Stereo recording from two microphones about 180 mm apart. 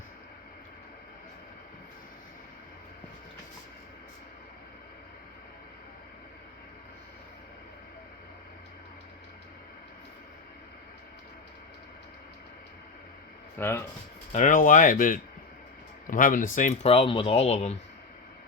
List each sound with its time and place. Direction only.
13.6 s speech: 15° left (ahead or behind)
14.3 s speech: 45° left (ahead or behind)